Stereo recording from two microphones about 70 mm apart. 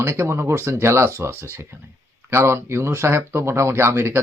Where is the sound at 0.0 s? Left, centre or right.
Right.